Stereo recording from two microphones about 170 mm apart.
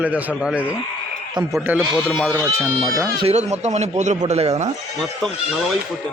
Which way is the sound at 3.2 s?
40° right (ahead or behind).